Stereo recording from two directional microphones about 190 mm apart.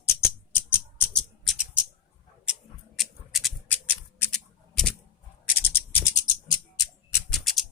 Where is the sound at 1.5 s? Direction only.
5° right (ahead or behind); by 7.2 s 20° left (ahead or behind).